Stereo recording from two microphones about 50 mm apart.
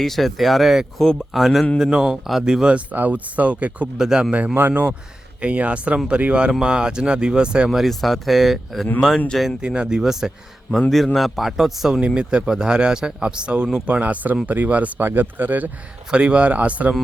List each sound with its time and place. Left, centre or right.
0.0 s a man's voice: centre
1.8 s a man's voice: centre
2.9 s speech: right
3.9 s a man's voice: centre
4.5 s speech: right
5.4 s speech: right
6.5 s a man's voice: centre
7.7 s a man's voice: centre
9.6 s a man's voice: centre
10.7 s a man's voice: centre
11.9 s a man's voice: centre
13.8 s speech: right
16.1 s speech: right